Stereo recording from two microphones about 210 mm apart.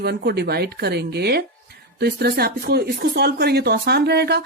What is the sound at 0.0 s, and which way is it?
Speech, 50° right (ahead or behind).